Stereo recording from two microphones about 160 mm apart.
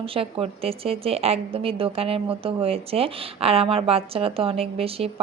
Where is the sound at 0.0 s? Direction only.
35° right (ahead or behind).